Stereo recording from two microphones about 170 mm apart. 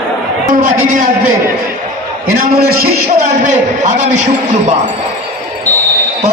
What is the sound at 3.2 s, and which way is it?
Speech, 45° right (ahead or behind).